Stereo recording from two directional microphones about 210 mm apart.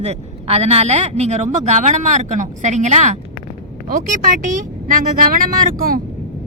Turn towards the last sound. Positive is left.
turn(degrees=-45)  # may be behind; listen again after turning